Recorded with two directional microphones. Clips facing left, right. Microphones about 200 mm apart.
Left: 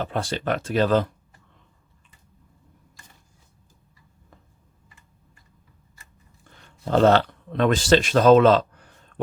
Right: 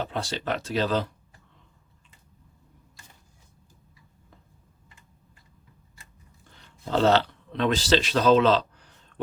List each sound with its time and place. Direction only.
0.0 s speech: 55° left (ahead or behind)
6.7 s speech: 50° left (ahead or behind)